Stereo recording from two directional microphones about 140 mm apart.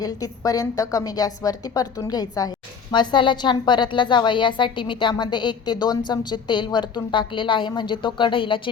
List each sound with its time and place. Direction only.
0.0 s a woman's voice: 25° left (ahead or behind)